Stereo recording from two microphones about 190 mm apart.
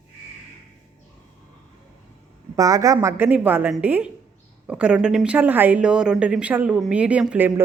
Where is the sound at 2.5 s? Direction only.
15° right (ahead or behind).